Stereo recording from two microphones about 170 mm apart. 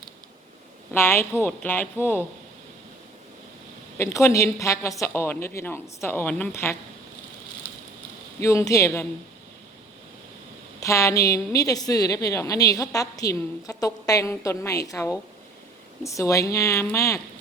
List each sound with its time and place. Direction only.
0.9 s a woman's voice: 15° left (ahead or behind)
3.9 s a woman's voice: 15° left (ahead or behind)
8.4 s a woman's voice: 15° left (ahead or behind)
10.8 s a woman's voice: 20° left (ahead or behind)